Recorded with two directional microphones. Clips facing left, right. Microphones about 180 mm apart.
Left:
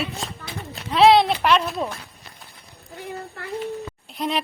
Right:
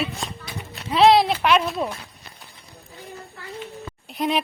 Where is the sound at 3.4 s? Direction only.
65° left (ahead or behind).